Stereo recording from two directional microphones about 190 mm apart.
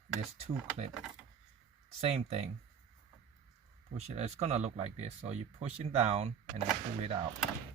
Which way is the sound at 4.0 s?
35° right (ahead or behind).